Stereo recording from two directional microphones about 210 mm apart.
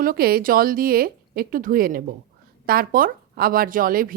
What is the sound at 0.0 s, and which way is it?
A woman's voice, 45° right (ahead or behind).